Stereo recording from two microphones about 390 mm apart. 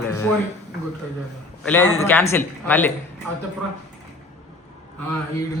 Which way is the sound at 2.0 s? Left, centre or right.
Centre.